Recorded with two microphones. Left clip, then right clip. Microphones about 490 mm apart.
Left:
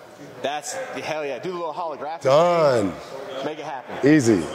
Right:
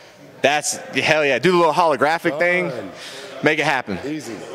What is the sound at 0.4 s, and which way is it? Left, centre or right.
A man's voice, right.